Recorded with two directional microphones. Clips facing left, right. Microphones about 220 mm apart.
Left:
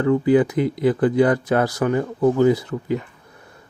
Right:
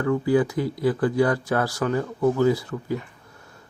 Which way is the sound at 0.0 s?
20° left (ahead or behind).